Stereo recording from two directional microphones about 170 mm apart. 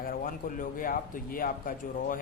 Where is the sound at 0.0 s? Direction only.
55° left (ahead or behind).